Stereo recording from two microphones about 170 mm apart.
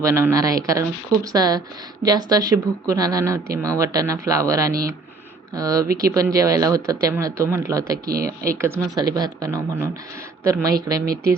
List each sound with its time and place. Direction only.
0.0 s speech: 15° right (ahead or behind)
8.0 s speech: 60° right (ahead or behind)
8.4 s speech: 15° right (ahead or behind)